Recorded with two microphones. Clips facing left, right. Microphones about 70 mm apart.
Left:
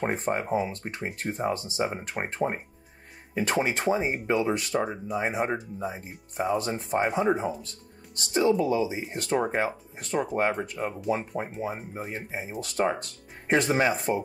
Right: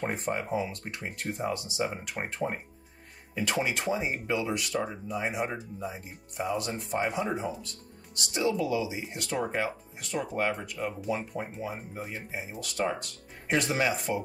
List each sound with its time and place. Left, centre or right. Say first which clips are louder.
0.0 s speech: left 4 dB; left
4.7 s speech: left 4 dB; centre
5.1 s speech: left 4 dB; left